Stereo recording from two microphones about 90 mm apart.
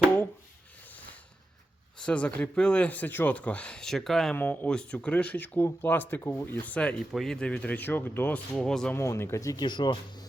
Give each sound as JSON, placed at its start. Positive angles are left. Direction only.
{"t": 2.0, "sound": "speech", "side_deg": 15}
{"t": 4.4, "sound": "speech", "side_deg": 15}
{"t": 7.0, "sound": "speech", "side_deg": 0}
{"t": 8.5, "sound": "speech", "side_deg": 5}
{"t": 9.0, "sound": "speech", "side_deg": 30}
{"t": 9.6, "sound": "speech", "side_deg": 60}